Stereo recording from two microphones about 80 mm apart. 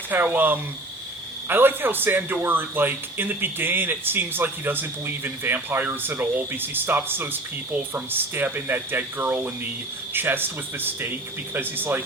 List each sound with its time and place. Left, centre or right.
0.1 s speech: right